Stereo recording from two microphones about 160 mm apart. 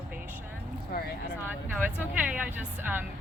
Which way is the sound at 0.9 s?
75° left (ahead or behind).